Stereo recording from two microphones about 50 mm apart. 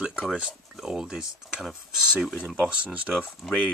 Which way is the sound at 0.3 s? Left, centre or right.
Centre.